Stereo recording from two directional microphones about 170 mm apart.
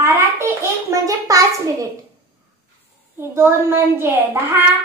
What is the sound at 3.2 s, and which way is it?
A child's voice, 15° right (ahead or behind).